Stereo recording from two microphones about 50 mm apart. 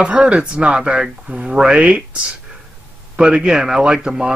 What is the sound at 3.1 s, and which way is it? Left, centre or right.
A man's voice, centre.